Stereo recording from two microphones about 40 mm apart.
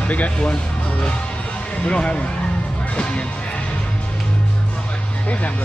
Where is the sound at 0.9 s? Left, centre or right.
Left.